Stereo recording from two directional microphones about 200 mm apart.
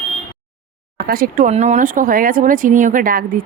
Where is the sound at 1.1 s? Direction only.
45° right (ahead or behind).